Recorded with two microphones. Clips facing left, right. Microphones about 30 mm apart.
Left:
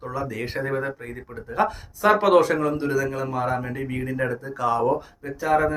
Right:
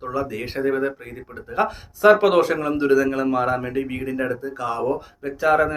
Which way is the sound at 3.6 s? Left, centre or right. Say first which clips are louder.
Right 4 dB; right.